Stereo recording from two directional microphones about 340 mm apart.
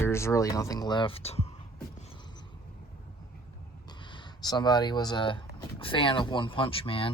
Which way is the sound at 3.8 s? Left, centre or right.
Centre.